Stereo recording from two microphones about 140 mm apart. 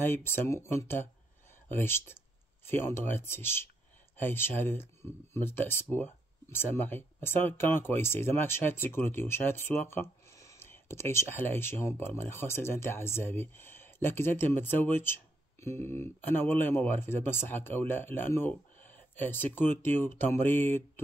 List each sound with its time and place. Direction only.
0.0 s speech: 15° left (ahead or behind)